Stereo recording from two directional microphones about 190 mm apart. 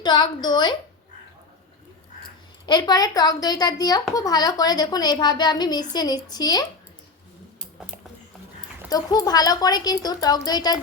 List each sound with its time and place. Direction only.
0.0 s speech: 20° left (ahead or behind)
2.6 s speech: 25° left (ahead or behind)
8.9 s speech: 20° left (ahead or behind)